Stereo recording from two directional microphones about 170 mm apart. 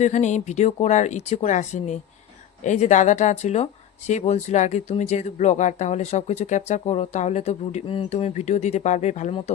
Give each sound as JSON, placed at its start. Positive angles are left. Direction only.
{"t": 0.0, "sound": "speech", "side_deg": 45}